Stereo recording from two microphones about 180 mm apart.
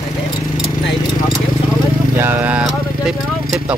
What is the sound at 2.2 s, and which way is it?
Speech, 10° right (ahead or behind).